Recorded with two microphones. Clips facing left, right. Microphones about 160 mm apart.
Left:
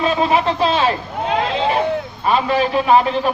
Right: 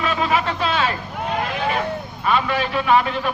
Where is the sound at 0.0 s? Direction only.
30° left (ahead or behind).